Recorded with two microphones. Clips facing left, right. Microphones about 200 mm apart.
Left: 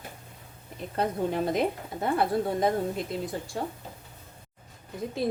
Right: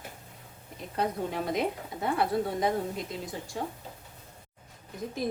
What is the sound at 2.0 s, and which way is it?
Speech, 50° left (ahead or behind).